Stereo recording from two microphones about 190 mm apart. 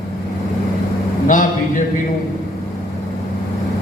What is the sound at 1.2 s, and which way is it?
Speech, 45° left (ahead or behind).